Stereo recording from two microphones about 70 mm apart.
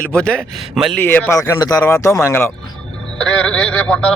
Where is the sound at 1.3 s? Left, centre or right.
Left.